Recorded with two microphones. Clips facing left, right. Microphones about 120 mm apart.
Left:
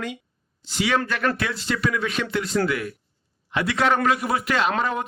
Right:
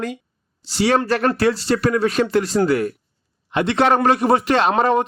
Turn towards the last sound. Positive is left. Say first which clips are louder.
# right 7 dB
turn(degrees=-35)  # may be behind; listen again after turning